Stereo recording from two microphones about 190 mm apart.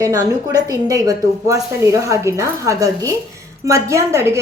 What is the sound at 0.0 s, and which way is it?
A woman's voice, 20° right (ahead or behind).